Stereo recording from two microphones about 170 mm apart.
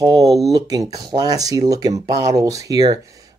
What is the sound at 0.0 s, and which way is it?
Speech, 20° right (ahead or behind).